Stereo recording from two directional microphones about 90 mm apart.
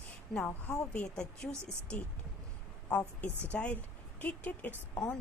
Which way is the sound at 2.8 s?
15° left (ahead or behind).